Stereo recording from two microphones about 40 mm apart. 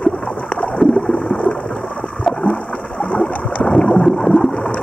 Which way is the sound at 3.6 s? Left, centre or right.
Centre.